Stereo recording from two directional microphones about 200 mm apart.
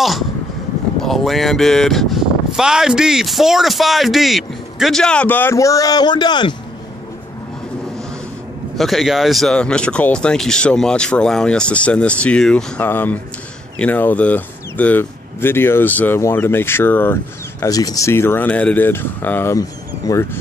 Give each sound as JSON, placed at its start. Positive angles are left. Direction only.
{"t": 1.0, "sound": "speech", "side_deg": 0}
{"t": 8.7, "sound": "speech", "side_deg": 0}